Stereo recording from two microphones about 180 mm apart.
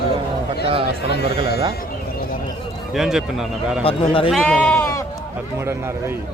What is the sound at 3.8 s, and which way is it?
Speech, 30° left (ahead or behind).